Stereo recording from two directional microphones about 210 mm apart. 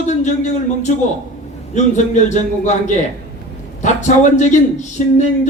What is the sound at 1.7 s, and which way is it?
Speech, 35° left (ahead or behind).